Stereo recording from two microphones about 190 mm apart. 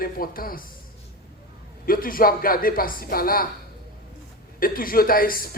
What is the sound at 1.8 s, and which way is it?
Speech, 50° left (ahead or behind).